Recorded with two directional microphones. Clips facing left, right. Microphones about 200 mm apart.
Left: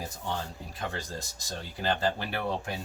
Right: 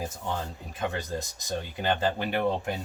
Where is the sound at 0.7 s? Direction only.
20° right (ahead or behind).